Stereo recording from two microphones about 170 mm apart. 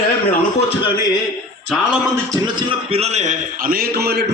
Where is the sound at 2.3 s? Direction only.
25° right (ahead or behind).